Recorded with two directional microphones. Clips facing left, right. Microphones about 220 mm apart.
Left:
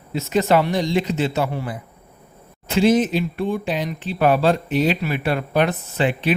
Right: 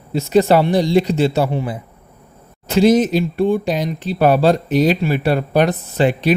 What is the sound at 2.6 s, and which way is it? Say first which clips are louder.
Speech: right 4 dB; 40° right (ahead or behind).